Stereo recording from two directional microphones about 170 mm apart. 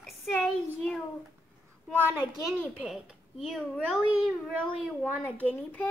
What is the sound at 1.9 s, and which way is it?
Speech, 10° right (ahead or behind).